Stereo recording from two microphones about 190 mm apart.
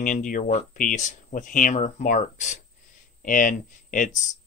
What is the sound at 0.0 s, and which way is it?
Speech, 45° left (ahead or behind).